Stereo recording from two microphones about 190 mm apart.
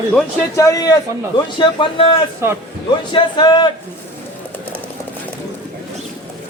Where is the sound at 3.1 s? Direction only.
25° left (ahead or behind).